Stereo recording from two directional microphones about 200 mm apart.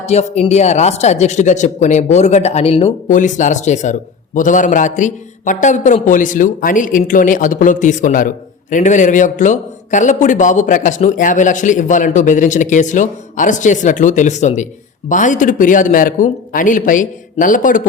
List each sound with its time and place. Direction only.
0.0 s a man's voice: 35° left (ahead or behind)